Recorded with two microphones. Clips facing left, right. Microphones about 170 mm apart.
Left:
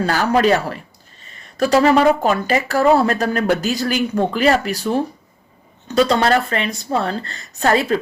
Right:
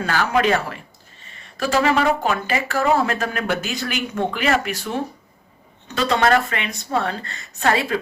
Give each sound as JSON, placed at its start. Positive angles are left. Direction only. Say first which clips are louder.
{"t": 0.0, "sound": "speech", "louder": "left 4 dB", "side_deg": 40}